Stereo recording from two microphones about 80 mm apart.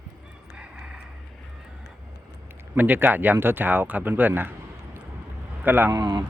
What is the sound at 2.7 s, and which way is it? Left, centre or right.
Speech, right.